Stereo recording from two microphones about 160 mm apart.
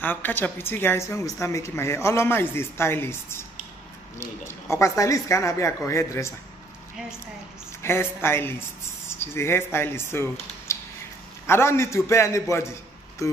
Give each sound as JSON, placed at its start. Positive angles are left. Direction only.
{"t": 0.0, "sound": "a woman's voice", "side_deg": 10}
{"t": 7.8, "sound": "a woman's voice", "side_deg": 15}
{"t": 10.7, "sound": "a sound", "side_deg": 20}
{"t": 11.4, "sound": "a woman's voice", "side_deg": 15}